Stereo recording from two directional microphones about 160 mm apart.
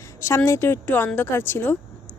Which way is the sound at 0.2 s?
15° left (ahead or behind).